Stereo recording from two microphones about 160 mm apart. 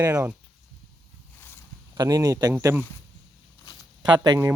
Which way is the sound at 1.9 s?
25° right (ahead or behind).